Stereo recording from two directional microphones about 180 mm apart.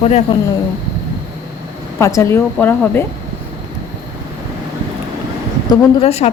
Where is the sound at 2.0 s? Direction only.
15° left (ahead or behind).